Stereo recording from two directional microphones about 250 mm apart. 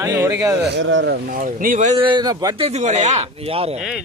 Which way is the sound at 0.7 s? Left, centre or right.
Right.